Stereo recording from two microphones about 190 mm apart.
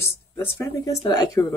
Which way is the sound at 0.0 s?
15° left (ahead or behind).